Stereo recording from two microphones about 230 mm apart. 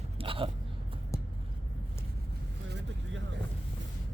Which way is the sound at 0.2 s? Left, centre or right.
Right.